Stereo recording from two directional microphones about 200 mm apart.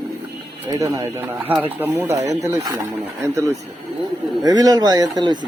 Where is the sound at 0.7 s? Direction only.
15° right (ahead or behind).